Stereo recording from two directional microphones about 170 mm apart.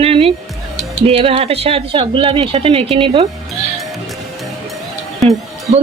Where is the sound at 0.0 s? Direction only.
35° right (ahead or behind).